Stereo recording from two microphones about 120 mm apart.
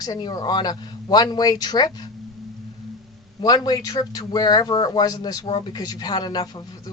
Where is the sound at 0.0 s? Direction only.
35° left (ahead or behind).